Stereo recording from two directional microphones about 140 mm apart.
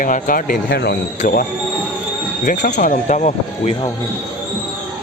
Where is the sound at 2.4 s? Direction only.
70° left (ahead or behind).